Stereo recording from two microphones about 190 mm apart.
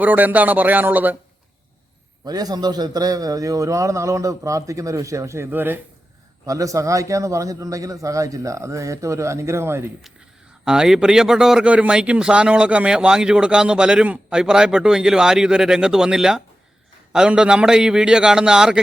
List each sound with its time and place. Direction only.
0.0 s a man's voice: 10° right (ahead or behind)
2.2 s a man's voice: 20° right (ahead or behind); by 18.8 s 5° right (ahead or behind)